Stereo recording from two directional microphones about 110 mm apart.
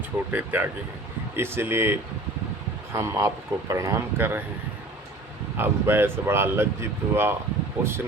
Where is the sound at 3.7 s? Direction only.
30° right (ahead or behind).